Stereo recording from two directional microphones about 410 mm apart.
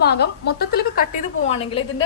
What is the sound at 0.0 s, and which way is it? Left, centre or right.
A woman's voice, left.